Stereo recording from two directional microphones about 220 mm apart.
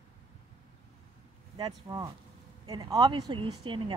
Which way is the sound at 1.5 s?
20° right (ahead or behind).